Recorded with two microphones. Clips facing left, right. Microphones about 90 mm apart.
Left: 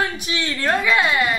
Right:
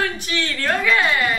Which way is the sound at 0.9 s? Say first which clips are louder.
Left 1 dB; 15° left (ahead or behind).